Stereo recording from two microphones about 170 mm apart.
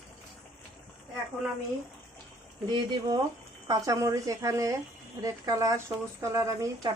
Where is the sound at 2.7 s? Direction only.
25° right (ahead or behind).